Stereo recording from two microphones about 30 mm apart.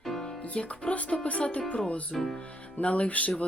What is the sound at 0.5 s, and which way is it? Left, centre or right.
Speech, left.